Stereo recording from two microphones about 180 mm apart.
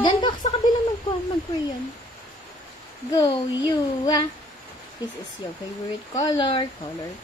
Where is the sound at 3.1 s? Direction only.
25° left (ahead or behind).